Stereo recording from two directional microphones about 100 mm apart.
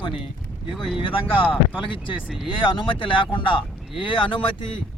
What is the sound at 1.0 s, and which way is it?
Speech, 65° left (ahead or behind).